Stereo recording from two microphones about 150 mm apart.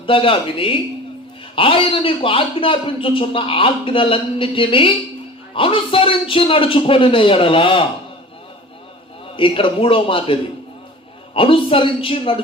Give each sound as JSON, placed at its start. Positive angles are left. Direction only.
{"t": 0.0, "sound": "a man's voice", "side_deg": 35}
{"t": 9.3, "sound": "a man's voice", "side_deg": 35}
{"t": 11.3, "sound": "a man's voice", "side_deg": 35}